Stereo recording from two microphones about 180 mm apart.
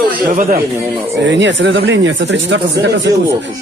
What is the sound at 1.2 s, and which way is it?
Speech, 80° right.